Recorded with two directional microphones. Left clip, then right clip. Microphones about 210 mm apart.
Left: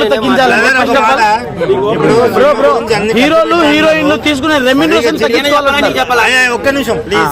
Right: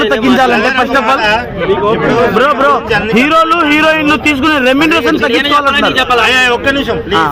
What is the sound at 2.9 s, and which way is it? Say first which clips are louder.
Speech: left 1 dB; 40° left (ahead or behind).